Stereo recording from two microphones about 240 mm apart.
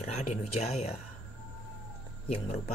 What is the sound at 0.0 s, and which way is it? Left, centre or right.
Speech, left.